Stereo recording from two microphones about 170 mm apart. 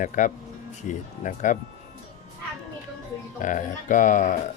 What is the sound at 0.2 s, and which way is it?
Speech, 45° left (ahead or behind).